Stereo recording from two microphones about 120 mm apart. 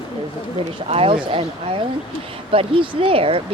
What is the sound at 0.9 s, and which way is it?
Speech, 50° right (ahead or behind).